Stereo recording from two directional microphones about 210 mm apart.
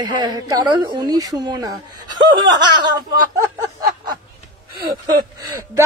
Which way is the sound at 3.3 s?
20° right (ahead or behind).